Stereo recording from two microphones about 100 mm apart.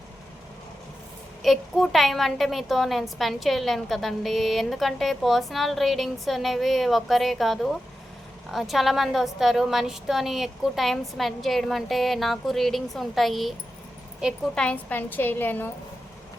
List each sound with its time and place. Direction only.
1.4 s a woman's voice: centre (ahead or behind)
14.5 s a woman's voice: 10° left (ahead or behind)